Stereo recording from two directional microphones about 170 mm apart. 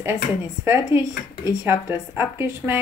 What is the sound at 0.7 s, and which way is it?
Speech, 15° right (ahead or behind).